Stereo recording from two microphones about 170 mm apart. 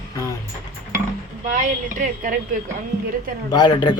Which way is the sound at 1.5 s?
50° right (ahead or behind).